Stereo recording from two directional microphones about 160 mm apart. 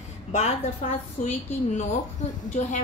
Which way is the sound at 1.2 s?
55° left (ahead or behind).